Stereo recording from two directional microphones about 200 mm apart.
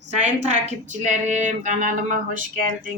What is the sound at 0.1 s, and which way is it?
A woman's voice, 35° right (ahead or behind).